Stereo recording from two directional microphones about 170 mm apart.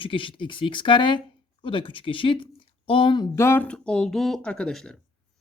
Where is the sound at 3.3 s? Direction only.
15° left (ahead or behind).